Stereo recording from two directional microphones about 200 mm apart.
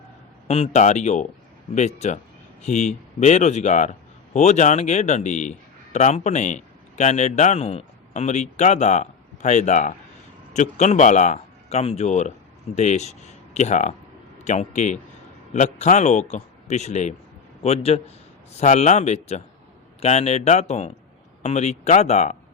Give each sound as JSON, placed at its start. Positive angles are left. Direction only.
{"t": 0.4, "sound": "speech", "side_deg": 30}
{"t": 2.6, "sound": "a man's voice", "side_deg": 35}